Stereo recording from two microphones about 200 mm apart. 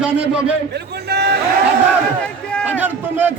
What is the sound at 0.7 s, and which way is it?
Speech, 55° right (ahead or behind).